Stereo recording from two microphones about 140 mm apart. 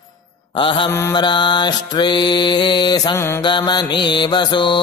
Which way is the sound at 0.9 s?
20° left (ahead or behind).